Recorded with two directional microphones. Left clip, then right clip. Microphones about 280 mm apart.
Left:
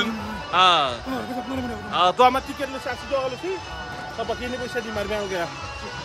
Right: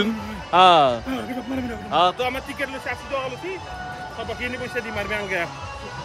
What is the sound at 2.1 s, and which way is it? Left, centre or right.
Speech, left.